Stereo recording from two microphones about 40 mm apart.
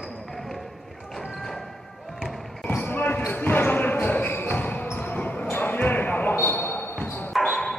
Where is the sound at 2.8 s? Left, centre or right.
Left.